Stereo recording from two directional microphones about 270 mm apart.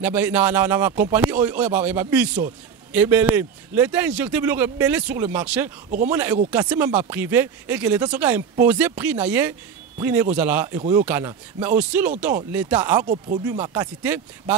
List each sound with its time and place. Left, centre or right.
0.0 s speech: centre
13.0 s speech: right
13.5 s speech: centre